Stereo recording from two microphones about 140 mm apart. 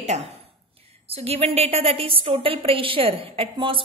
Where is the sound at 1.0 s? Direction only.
45° right (ahead or behind).